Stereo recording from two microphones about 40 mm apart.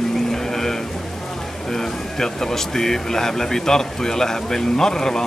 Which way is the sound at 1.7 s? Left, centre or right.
Centre.